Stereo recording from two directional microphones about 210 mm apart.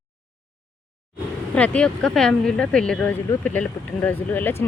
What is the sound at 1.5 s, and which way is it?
Speech, 5° left (ahead or behind).